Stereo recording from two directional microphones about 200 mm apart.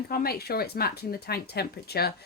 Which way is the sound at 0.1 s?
50° left (ahead or behind).